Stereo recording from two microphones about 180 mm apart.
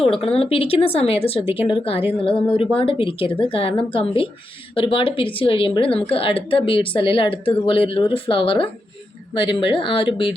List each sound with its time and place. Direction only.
0.2 s speech: 30° left (ahead or behind)